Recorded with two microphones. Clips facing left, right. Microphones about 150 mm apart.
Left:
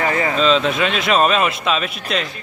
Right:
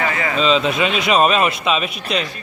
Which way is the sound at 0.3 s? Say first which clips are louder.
Right 1 dB; centre (ahead or behind).